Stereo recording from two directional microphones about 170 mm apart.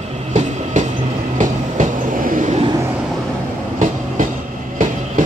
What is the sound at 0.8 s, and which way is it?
Train, 50° right (ahead or behind).